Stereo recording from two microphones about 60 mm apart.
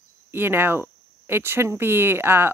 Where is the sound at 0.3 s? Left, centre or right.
Right.